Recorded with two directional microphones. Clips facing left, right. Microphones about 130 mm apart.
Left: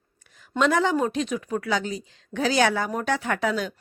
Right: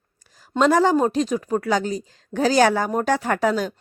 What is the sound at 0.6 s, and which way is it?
Speech, 40° right (ahead or behind).